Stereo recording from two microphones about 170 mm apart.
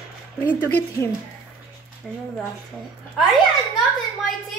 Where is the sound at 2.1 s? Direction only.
Centre (ahead or behind).